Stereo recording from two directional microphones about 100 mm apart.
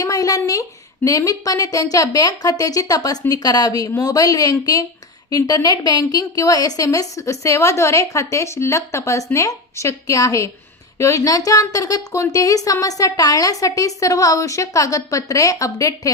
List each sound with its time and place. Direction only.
0.0 s a woman's voice: 35° left (ahead or behind)